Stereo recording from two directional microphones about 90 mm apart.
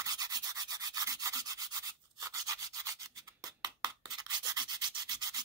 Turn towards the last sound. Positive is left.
turn(degrees=-50)  # may be behind; listen again after turning